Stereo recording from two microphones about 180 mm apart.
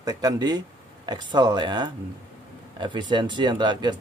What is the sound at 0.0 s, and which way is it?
Speech, 20° right (ahead or behind).